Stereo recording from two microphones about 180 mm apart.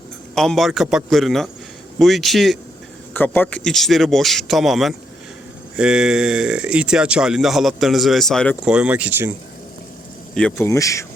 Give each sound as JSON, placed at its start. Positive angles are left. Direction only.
{"t": 0.3, "sound": "speech", "side_deg": 0}
{"t": 10.3, "sound": "speech", "side_deg": 5}
{"t": 10.7, "sound": "speech", "side_deg": 15}